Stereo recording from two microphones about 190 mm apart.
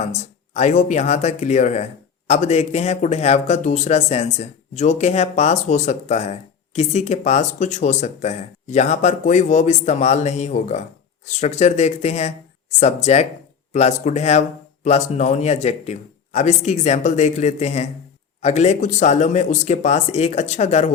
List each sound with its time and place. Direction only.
0.0 s speech: 35° left (ahead or behind)